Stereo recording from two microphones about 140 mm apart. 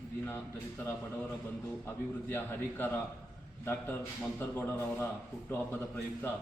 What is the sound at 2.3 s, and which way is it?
Speech, 15° left (ahead or behind).